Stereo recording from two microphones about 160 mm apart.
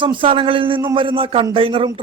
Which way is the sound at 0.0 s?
30° right (ahead or behind).